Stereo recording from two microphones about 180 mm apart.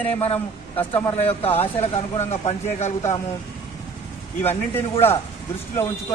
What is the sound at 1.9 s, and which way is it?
Speech, 35° left (ahead or behind).